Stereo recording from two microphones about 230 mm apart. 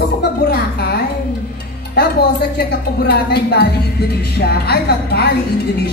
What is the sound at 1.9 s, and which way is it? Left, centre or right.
A woman's voice, left.